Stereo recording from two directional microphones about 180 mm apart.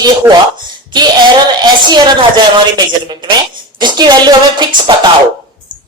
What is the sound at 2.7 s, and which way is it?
Speech, 25° right (ahead or behind).